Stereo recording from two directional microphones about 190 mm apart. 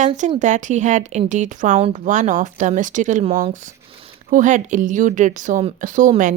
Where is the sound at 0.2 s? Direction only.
40° right (ahead or behind).